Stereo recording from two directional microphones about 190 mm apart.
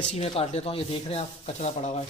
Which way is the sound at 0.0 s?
35° left (ahead or behind).